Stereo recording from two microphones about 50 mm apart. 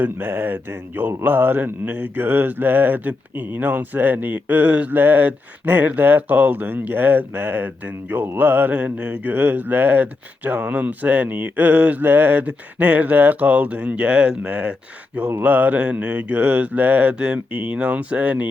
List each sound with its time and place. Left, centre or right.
0.0 s speech: right
4.9 s speech: right; by 14.3 s centre
14.4 s mantra: right